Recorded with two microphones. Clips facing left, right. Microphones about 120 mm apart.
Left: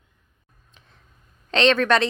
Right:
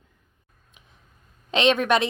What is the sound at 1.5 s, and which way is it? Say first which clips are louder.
Speech: left 1 dB; 15° right (ahead or behind).